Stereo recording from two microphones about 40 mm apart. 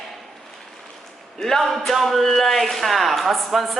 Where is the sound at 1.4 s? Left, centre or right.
Centre.